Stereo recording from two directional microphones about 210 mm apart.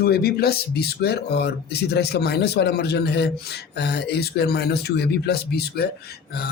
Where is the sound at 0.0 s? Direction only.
45° left (ahead or behind).